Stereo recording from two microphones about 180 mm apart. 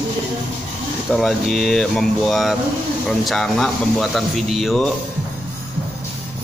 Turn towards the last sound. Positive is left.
turn(degrees=0)  # may be behind; listen again after turning